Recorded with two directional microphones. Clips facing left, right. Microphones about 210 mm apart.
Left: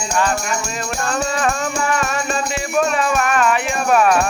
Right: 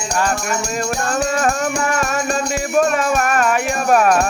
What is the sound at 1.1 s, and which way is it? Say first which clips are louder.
Music: right 1 dB; 45° right (ahead or behind).